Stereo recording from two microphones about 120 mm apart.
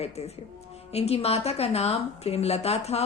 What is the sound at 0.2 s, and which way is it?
Speech, 60° left (ahead or behind).